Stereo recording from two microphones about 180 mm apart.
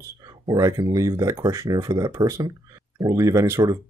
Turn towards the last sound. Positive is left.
turn(degrees=-15)  # may be behind; listen again after turning